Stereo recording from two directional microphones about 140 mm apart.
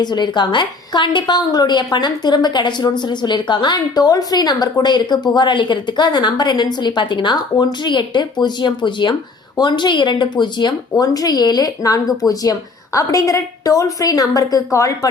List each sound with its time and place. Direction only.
0.0 s a woman's voice: 30° left (ahead or behind)